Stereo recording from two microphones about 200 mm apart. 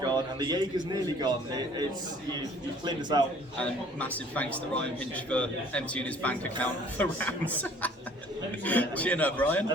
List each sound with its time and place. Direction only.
0.0 s a sound: 20° right (ahead or behind)
0.9 s a man's voice: 20° right (ahead or behind)
2.8 s a man's voice: 20° right (ahead or behind)
3.6 s a man's voice: 5° left (ahead or behind)